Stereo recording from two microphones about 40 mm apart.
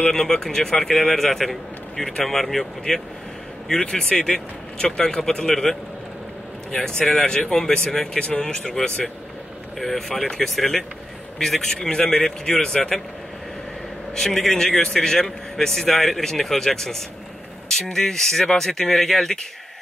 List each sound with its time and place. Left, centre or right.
0.1 s speech: centre
3.8 s speech: left
7.0 s speech: centre
9.8 s speech: centre
10.5 s speech: centre
14.1 s speech: centre